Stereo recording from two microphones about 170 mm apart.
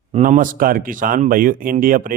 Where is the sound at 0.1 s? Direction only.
45° right (ahead or behind).